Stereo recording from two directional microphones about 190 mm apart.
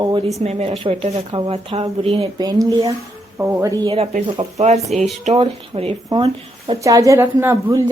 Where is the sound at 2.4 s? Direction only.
20° right (ahead or behind).